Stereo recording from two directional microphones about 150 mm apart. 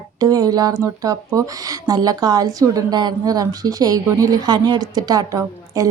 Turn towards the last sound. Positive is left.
turn(degrees=-25)  # may be behind; listen again after turning